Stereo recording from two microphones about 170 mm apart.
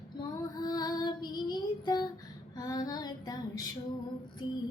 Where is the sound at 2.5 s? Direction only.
20° left (ahead or behind).